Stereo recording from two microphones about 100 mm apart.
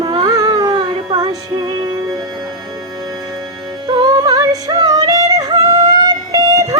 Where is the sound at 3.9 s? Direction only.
45° right (ahead or behind).